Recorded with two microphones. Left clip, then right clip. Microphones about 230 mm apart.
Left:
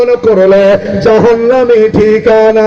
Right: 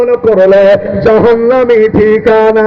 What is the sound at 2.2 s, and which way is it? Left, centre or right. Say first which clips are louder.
Music: left 2 dB; centre.